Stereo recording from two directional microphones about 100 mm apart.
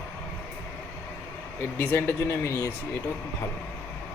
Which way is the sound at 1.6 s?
20° left (ahead or behind).